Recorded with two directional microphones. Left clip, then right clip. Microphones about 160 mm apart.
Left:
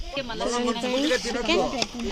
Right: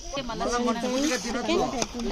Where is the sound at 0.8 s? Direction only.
10° right (ahead or behind).